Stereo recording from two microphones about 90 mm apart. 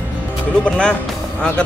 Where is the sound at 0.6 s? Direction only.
10° left (ahead or behind).